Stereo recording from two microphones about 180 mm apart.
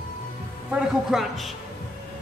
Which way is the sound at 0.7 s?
Centre (ahead or behind).